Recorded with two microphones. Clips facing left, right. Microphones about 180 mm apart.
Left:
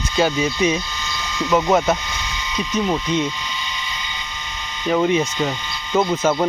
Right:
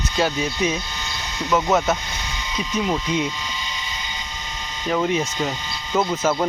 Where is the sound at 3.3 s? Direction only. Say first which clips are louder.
Left 1 dB; 40° right (ahead or behind).